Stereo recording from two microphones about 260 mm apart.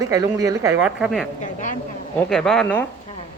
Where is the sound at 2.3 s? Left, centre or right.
Centre.